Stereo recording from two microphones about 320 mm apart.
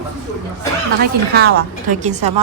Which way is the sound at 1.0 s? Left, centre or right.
Right.